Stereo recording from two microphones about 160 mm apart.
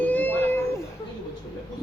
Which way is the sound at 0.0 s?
10° left (ahead or behind).